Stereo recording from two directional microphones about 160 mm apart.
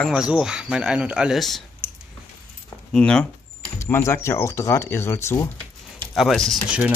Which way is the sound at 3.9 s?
15° left (ahead or behind).